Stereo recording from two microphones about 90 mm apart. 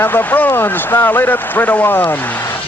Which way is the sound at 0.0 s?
25° left (ahead or behind).